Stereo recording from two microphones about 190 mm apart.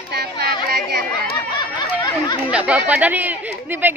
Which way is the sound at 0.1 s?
55° right (ahead or behind).